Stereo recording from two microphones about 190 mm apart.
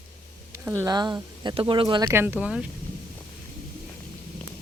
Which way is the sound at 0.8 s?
20° right (ahead or behind).